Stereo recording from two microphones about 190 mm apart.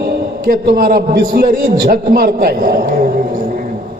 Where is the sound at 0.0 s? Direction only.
55° right (ahead or behind).